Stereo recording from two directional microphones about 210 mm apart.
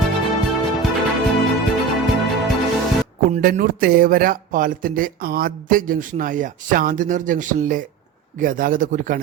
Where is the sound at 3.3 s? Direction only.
40° right (ahead or behind).